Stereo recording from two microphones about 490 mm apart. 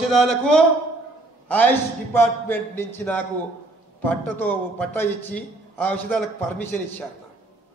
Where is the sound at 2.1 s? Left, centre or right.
Centre.